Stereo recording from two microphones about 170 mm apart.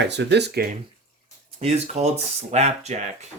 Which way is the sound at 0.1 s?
90° right.